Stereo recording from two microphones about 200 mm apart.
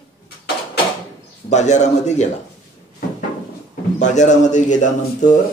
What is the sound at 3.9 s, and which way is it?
Speech, 35° left (ahead or behind).